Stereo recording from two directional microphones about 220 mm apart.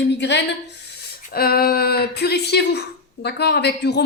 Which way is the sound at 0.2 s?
55° left (ahead or behind).